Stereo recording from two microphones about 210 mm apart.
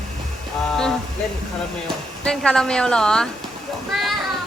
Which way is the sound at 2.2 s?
5° left (ahead or behind).